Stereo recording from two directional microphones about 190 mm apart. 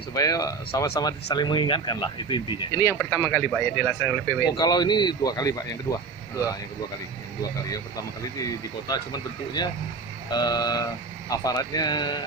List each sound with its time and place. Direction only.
0.1 s speech: 20° left (ahead or behind)
3.3 s a man's voice: centre (ahead or behind)
4.5 s speech: 20° left (ahead or behind)
8.4 s speech: 20° left (ahead or behind)